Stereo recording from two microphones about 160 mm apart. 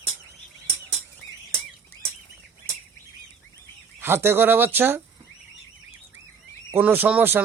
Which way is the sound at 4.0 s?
15° right (ahead or behind).